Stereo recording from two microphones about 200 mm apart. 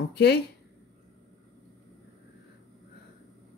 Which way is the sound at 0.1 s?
55° left (ahead or behind).